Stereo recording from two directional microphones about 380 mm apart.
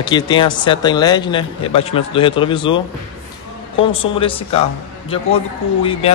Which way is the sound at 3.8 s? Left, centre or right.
Centre.